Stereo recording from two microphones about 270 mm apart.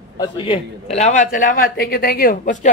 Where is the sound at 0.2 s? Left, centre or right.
Left.